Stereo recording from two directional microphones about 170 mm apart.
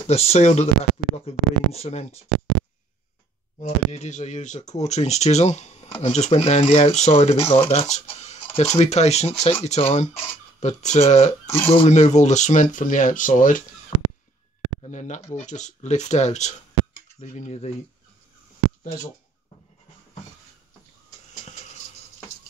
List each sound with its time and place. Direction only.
0.0 s speech: 35° left (ahead or behind)
3.5 s speech: 40° left (ahead or behind)
7.7 s a sound: 40° left (ahead or behind)
8.7 s speech: 40° left (ahead or behind)
11.4 s speech: 15° left (ahead or behind)
11.8 s speech: 45° left (ahead or behind)
14.8 s speech: 45° left (ahead or behind)